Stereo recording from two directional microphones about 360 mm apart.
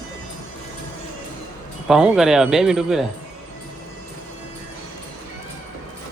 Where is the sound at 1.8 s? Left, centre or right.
Centre.